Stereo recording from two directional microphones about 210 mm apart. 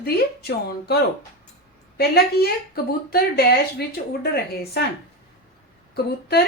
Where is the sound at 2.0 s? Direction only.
50° left (ahead or behind).